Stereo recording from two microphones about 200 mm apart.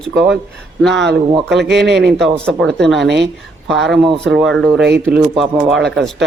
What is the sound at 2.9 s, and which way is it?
Speech, 60° right (ahead or behind).